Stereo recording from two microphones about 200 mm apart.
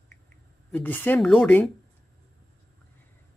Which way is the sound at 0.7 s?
10° left (ahead or behind).